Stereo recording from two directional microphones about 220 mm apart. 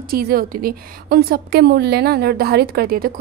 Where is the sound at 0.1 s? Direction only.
40° right (ahead or behind).